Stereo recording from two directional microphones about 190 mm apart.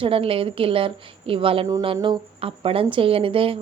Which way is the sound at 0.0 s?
30° right (ahead or behind).